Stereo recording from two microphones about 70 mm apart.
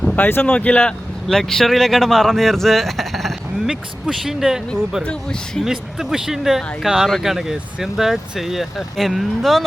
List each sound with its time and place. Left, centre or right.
0.2 s speech: left
0.4 s speech: centre
1.3 s speech: centre
5.0 s speech: centre
5.6 s speech: centre